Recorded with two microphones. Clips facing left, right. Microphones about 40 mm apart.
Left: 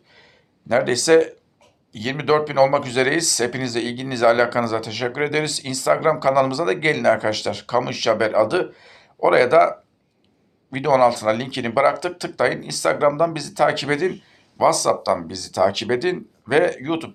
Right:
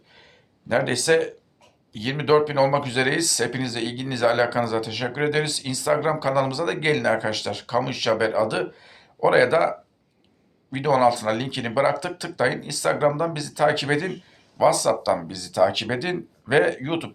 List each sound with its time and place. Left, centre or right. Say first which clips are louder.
0.9 s speech: left 7 dB; centre
6.1 s speech: left 5 dB; centre